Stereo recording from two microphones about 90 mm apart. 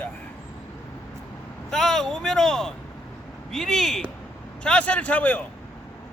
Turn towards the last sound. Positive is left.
turn(degrees=15)  # may be behind; listen again after turning